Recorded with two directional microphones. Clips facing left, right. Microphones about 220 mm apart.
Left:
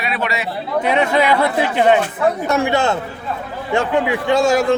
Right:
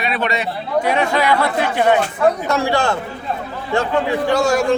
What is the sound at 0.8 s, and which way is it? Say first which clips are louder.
A man's voice: left 1 dB; 20° left (ahead or behind).